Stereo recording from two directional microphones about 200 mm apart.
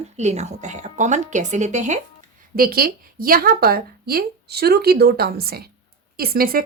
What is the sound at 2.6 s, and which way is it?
Speech, 50° right (ahead or behind).